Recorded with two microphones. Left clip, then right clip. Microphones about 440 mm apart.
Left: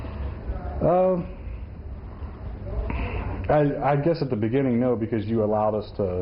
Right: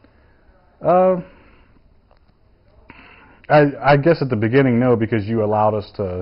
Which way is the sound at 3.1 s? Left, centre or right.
Right.